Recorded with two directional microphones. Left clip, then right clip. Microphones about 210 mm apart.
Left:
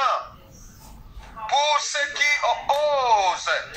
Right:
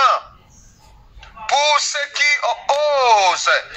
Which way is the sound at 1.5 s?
25° right (ahead or behind).